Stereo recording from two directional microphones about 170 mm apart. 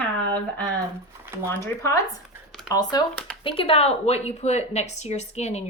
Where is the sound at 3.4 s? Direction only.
35° left (ahead or behind).